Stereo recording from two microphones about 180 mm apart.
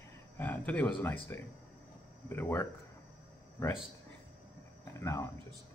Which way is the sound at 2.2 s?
10° left (ahead or behind).